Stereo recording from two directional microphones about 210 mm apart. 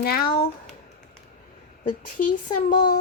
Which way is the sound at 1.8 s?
40° left (ahead or behind).